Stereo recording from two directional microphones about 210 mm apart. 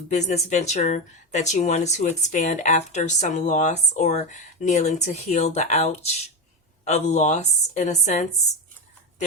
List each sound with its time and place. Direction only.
0.1 s speech: 35° left (ahead or behind)